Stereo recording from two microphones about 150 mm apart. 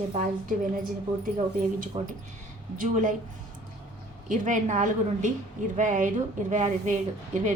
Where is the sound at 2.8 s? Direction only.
60° right (ahead or behind).